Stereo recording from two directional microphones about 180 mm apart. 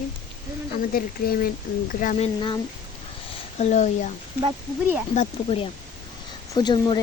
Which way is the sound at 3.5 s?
40° left (ahead or behind).